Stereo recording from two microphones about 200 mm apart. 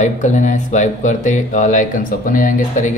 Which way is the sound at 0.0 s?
40° left (ahead or behind).